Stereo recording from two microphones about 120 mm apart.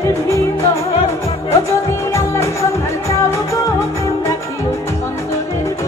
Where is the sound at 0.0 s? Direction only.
25° left (ahead or behind).